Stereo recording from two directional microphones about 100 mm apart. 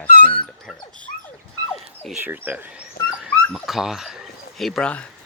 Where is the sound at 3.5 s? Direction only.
5° right (ahead or behind).